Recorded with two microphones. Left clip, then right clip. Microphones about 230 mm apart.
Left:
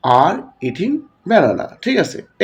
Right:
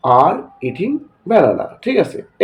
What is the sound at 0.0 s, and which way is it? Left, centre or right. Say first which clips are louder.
Speech: right 1 dB; left.